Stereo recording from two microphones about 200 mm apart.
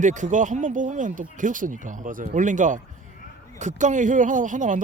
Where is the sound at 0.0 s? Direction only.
40° right (ahead or behind).